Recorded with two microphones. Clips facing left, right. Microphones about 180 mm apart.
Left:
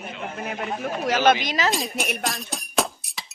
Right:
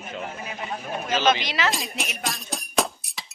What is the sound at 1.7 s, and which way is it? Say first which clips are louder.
Speech: left 4 dB; centre (ahead or behind).